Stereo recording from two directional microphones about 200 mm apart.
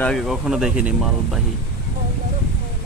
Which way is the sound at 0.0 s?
Centre (ahead or behind).